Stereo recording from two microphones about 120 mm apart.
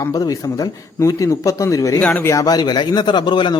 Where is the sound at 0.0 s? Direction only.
30° left (ahead or behind).